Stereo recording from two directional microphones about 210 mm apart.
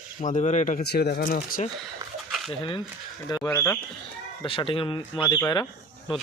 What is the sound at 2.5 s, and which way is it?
Speech, 25° left (ahead or behind).